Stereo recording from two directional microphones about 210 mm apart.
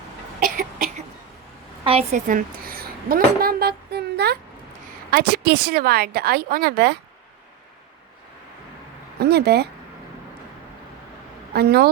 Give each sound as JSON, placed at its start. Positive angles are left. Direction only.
{"t": 0.3, "sound": "cough", "side_deg": -45}
{"t": 1.8, "sound": "a woman's voice", "side_deg": -30}
{"t": 9.1, "sound": "speech", "side_deg": -50}
{"t": 11.5, "sound": "a woman's voice", "side_deg": -50}